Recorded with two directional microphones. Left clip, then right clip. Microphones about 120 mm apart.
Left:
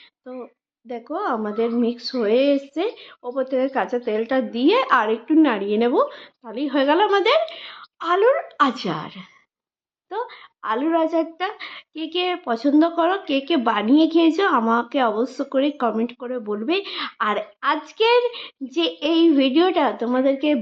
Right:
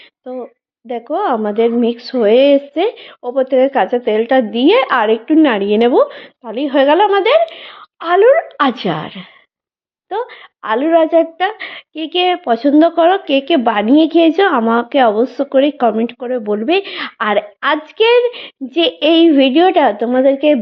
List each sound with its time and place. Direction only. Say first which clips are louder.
0.9 s a woman's voice: right 9 dB; 35° right (ahead or behind)